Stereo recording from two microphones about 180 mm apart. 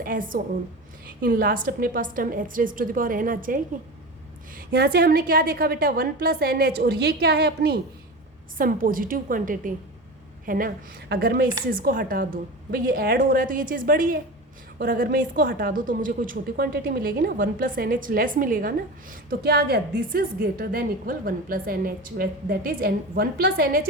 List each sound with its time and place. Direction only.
0.0 s a woman's voice: 50° right (ahead or behind)
4.5 s a woman's voice: 60° right (ahead or behind)
8.5 s a woman's voice: 50° right (ahead or behind)
19.3 s a woman's voice: 65° right (ahead or behind)